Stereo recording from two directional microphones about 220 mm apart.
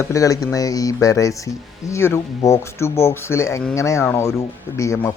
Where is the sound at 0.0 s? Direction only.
15° left (ahead or behind).